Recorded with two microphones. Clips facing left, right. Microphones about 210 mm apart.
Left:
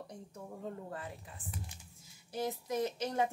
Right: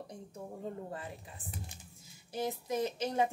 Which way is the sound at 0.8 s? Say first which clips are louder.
Right 1 dB; 20° right (ahead or behind).